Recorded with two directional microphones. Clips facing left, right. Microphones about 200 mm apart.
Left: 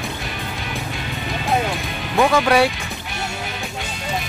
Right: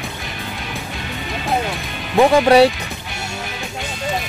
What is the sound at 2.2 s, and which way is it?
Speech, 30° right (ahead or behind).